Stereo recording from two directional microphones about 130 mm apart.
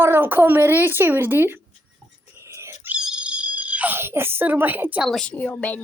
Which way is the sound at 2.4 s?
20° right (ahead or behind).